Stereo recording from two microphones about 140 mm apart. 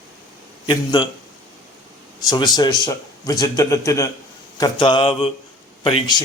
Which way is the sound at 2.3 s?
30° left (ahead or behind).